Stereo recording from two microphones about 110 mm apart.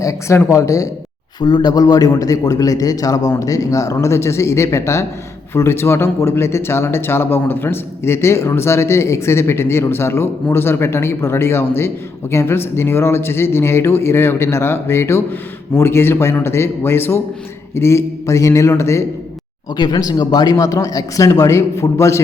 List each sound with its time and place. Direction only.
0.0 s speech: 30° left (ahead or behind)
1.4 s speech: 40° left (ahead or behind); by 19.0 s 25° left (ahead or behind)
19.7 s speech: 40° left (ahead or behind)